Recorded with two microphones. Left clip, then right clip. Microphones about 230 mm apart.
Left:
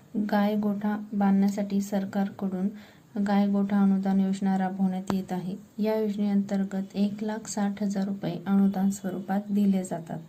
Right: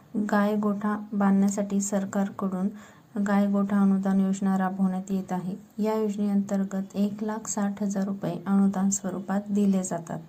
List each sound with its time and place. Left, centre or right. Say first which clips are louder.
0.4 s a woman's voice: right 2 dB; centre
6.5 s a woman's voice: right 1 dB; centre
6.9 s a woman's voice: even; centre
7.5 s a woman's voice: right 1 dB; centre